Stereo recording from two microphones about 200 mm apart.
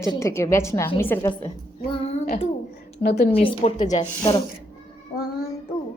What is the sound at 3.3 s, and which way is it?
Speech, 30° left (ahead or behind).